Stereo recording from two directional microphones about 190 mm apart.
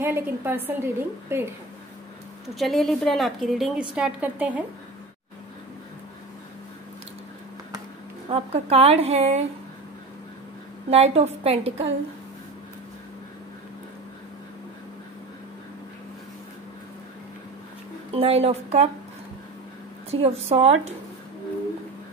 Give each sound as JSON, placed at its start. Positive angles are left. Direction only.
{"t": 0.0, "sound": "a woman's voice", "side_deg": -10}
{"t": 2.4, "sound": "a woman's voice", "side_deg": 0}
{"t": 8.3, "sound": "a woman's voice", "side_deg": -30}
{"t": 10.9, "sound": "a woman's voice", "side_deg": -35}
{"t": 18.1, "sound": "a woman's voice", "side_deg": -30}
{"t": 20.1, "sound": "a woman's voice", "side_deg": -30}